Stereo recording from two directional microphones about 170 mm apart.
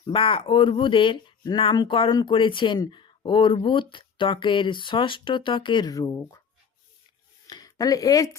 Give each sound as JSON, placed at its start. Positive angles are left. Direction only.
{"t": 0.0, "sound": "speech", "side_deg": 30}
{"t": 7.4, "sound": "speech", "side_deg": 20}